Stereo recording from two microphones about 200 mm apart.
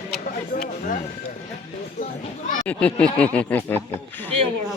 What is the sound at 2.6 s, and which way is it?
Speech, 5° left (ahead or behind).